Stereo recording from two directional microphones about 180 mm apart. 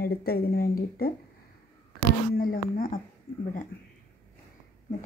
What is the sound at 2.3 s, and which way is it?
Speech, 50° left (ahead or behind).